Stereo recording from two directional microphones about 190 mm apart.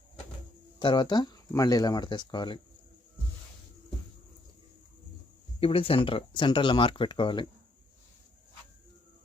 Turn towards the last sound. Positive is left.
turn(degrees=25)  # may be behind; listen again after turning